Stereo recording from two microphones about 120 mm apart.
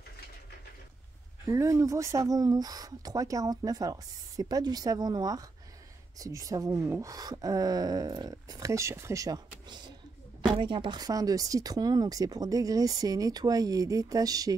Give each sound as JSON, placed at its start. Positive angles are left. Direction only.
{"t": 1.5, "sound": "speech", "side_deg": -25}